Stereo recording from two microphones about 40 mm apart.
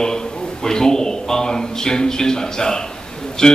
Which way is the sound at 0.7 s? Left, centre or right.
Centre.